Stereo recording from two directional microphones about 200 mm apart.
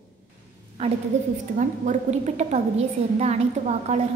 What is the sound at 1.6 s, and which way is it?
A woman's voice, 35° right (ahead or behind).